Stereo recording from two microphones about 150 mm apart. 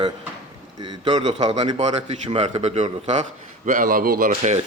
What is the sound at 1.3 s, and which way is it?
Speech, 50° right (ahead or behind).